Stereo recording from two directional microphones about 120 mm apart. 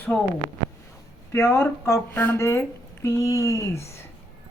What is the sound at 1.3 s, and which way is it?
Speech, 20° left (ahead or behind).